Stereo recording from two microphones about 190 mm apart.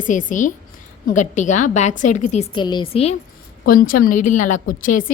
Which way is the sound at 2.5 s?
25° left (ahead or behind).